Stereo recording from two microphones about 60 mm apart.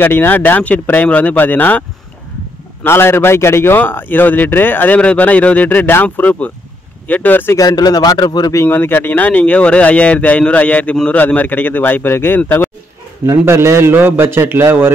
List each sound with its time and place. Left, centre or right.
0.0 s speech: left
2.8 s a man's voice: left
7.5 s a man's voice: left
8.6 s a man's voice: left
13.3 s a man's voice: right